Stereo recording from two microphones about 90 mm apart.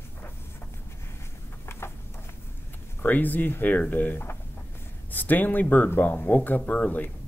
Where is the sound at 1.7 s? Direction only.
30° left (ahead or behind).